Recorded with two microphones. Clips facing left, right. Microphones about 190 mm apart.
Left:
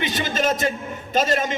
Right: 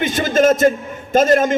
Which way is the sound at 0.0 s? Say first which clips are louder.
Right 8 dB; 50° right (ahead or behind).